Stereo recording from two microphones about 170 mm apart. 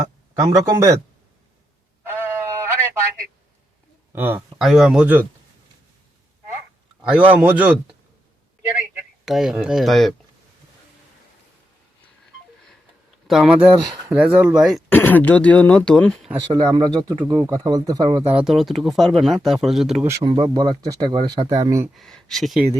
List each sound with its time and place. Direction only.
0.0 s speech: 20° right (ahead or behind)
2.0 s a sound: 15° right (ahead or behind)
4.1 s speech: 15° right (ahead or behind)
7.0 s speech: 10° right (ahead or behind)
9.2 s speech: centre (ahead or behind)
13.2 s speech: 5° right (ahead or behind)
14.8 s speech: 10° left (ahead or behind)
16.5 s speech: 25° right (ahead or behind)
17.2 s speech: 15° right (ahead or behind)
18.3 s speech: 5° right (ahead or behind)
20.1 s speech: 20° right (ahead or behind)
21.9 s speech: centre (ahead or behind)